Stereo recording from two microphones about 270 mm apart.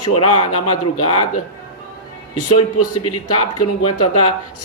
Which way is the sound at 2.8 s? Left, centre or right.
Left.